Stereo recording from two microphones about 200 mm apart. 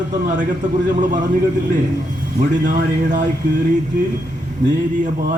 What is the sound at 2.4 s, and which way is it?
Speech, 40° right (ahead or behind).